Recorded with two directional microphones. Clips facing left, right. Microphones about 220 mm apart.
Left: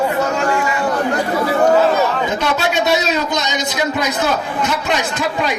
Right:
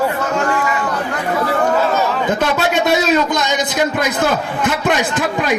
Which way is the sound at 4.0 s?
55° right (ahead or behind).